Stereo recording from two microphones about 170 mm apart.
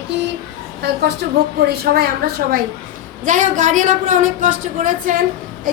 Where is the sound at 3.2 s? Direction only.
50° right (ahead or behind).